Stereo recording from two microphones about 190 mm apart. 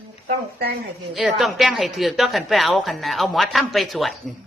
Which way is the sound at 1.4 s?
Centre (ahead or behind).